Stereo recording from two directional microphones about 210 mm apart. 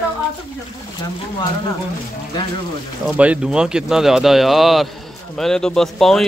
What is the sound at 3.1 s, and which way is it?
A man's voice, 5° right (ahead or behind).